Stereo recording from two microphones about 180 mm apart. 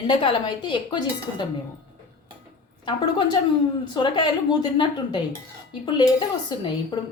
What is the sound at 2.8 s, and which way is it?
A woman's voice, 25° left (ahead or behind).